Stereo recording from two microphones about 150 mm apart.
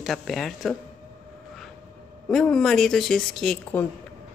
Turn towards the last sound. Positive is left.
turn(degrees=10)  # may be behind; listen again after turning